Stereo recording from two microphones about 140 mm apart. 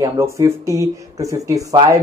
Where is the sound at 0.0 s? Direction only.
20° right (ahead or behind).